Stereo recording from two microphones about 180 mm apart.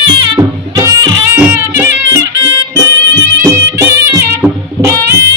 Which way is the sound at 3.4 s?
15° right (ahead or behind).